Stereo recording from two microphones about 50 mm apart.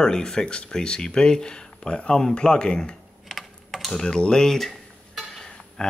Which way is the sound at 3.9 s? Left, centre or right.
Centre.